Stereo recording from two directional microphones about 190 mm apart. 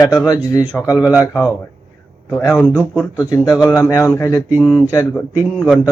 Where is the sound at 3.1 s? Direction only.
15° left (ahead or behind).